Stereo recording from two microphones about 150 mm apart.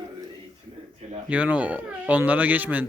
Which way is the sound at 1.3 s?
10° right (ahead or behind).